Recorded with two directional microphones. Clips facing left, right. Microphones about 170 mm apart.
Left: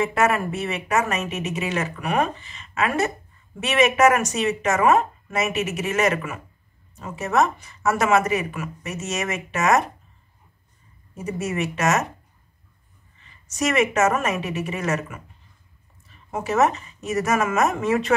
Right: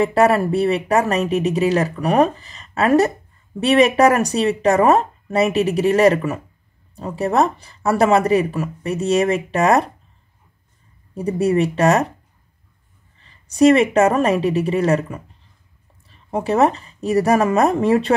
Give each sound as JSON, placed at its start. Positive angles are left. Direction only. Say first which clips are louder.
{"t": 0.0, "sound": "speech", "louder": "right 6 dB", "side_deg": -35}
{"t": 11.1, "sound": "speech", "louder": "right 9 dB", "side_deg": -35}
{"t": 13.2, "sound": "speech", "louder": "right 12 dB", "side_deg": -30}